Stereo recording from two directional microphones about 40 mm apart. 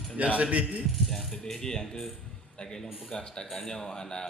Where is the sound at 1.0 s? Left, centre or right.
Centre.